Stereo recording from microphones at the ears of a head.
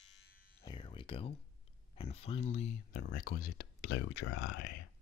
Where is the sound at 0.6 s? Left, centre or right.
Left.